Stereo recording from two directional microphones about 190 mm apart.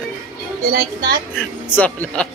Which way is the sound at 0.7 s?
55° right (ahead or behind).